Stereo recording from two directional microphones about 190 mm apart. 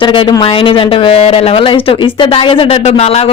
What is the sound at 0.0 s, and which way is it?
A woman's voice, 25° left (ahead or behind).